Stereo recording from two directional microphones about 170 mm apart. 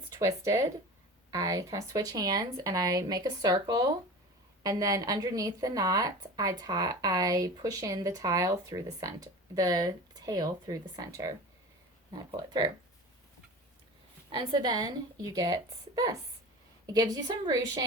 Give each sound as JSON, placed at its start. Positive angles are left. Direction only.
{"t": 0.1, "sound": "a woman's voice", "side_deg": -20}
{"t": 14.3, "sound": "a woman's voice", "side_deg": -30}